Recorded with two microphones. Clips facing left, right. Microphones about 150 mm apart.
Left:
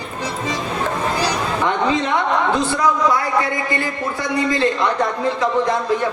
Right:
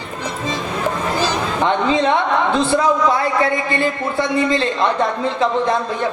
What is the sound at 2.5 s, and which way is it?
A woman's voice, 25° right (ahead or behind).